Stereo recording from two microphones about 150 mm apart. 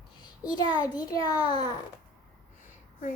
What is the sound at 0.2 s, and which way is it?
A child's voice, 30° left (ahead or behind).